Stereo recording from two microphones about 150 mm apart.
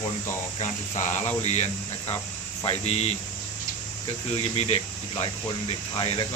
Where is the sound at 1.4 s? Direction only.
45° left (ahead or behind).